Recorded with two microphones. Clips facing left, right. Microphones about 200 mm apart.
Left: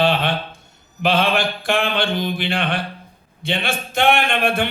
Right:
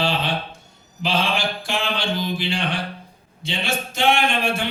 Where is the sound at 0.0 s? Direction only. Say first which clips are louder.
Left 5 dB; 55° left (ahead or behind).